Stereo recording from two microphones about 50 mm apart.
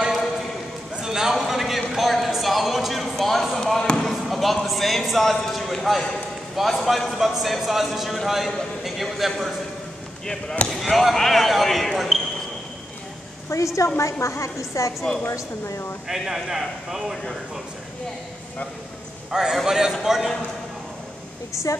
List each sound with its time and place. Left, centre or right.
0.9 s a sound: centre
3.5 s basketball bounce: centre
4.6 s speech: centre
10.7 s speech: centre
13.5 s a woman's voice: left
14.2 s a woman's voice: left
16.1 s a man's voice: centre
19.3 s a man's voice: centre